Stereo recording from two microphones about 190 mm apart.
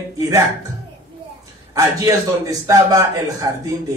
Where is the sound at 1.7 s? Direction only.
20° right (ahead or behind).